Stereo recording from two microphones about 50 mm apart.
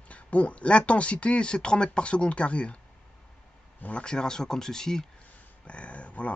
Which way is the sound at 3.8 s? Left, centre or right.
Left.